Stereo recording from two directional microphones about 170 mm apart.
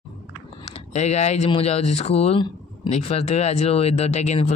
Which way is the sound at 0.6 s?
40° left (ahead or behind).